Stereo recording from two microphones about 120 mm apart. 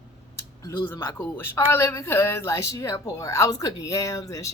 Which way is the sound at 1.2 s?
20° left (ahead or behind).